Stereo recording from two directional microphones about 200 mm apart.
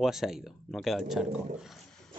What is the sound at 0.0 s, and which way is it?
Speech, centre (ahead or behind).